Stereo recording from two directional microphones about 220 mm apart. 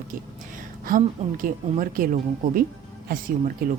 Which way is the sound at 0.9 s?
40° right (ahead or behind).